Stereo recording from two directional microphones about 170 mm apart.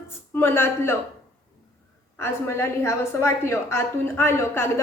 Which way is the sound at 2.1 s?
15° left (ahead or behind).